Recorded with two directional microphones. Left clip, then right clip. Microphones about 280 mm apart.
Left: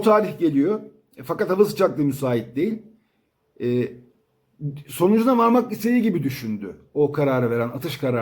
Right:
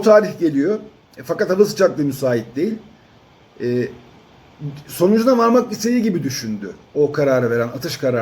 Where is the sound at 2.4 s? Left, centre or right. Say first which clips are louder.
Right 3 dB; centre.